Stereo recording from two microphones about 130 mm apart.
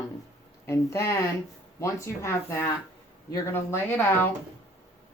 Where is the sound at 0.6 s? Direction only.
20° left (ahead or behind).